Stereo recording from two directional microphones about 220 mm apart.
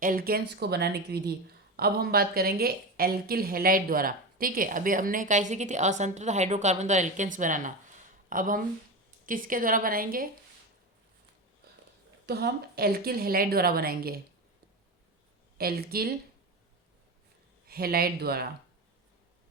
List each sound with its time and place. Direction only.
0.0 s speech: 40° right (ahead or behind)
12.2 s a woman's voice: 45° right (ahead or behind)
15.5 s a woman's voice: 45° right (ahead or behind)
17.7 s a woman's voice: 45° right (ahead or behind)